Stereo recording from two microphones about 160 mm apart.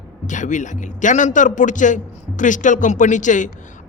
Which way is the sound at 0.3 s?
50° left (ahead or behind).